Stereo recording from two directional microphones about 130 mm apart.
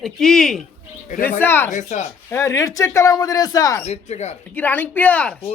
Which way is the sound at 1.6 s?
70° left (ahead or behind).